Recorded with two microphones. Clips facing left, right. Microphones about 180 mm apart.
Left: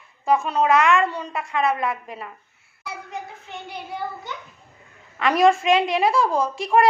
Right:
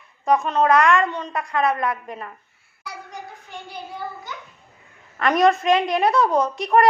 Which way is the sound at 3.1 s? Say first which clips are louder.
Left 3 dB; 25° left (ahead or behind).